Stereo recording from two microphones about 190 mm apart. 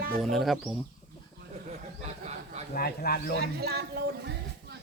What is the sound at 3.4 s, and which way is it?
Speech, 55° right (ahead or behind).